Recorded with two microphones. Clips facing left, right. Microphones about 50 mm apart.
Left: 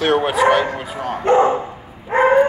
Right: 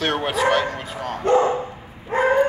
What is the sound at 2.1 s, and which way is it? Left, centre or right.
Bow-wow, left.